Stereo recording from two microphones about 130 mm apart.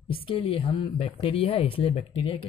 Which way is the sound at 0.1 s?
45° left (ahead or behind).